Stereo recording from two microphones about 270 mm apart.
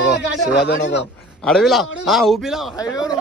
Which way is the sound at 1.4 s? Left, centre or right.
Centre.